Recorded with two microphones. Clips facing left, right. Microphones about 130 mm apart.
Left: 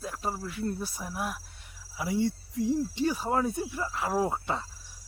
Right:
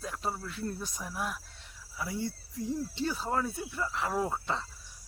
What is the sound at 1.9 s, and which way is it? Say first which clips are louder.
Speech: left 7 dB; 20° left (ahead or behind).